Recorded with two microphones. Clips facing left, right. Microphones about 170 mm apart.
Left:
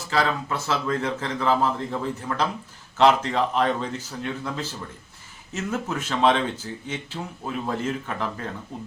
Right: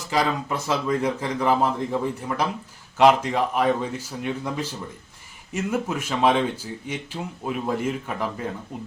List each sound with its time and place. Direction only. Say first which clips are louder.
0.1 s speech: right 1 dB; 15° right (ahead or behind)